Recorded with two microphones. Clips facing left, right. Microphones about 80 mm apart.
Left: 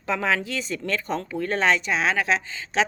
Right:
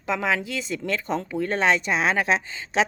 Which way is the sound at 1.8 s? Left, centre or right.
Right.